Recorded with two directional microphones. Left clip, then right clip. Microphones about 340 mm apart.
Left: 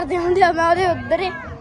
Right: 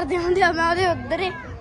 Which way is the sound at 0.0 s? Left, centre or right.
Centre.